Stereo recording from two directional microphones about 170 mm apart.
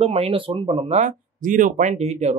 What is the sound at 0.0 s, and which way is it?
Speech, 35° right (ahead or behind).